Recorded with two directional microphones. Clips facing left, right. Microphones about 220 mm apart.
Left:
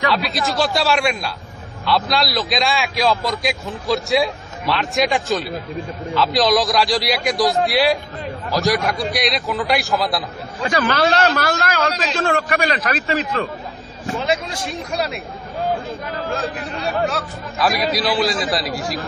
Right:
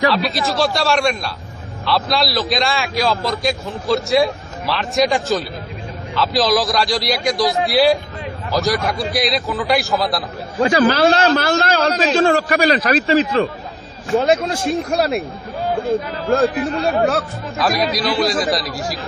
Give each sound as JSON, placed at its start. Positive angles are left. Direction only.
{"t": 0.1, "sound": "a man's voice", "side_deg": 0}
{"t": 10.6, "sound": "a man's voice", "side_deg": -30}
{"t": 14.1, "sound": "speech", "side_deg": -50}
{"t": 17.6, "sound": "a man's voice", "side_deg": 0}